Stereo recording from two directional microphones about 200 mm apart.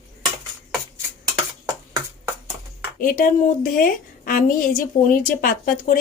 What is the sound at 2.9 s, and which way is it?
Speech, 45° left (ahead or behind).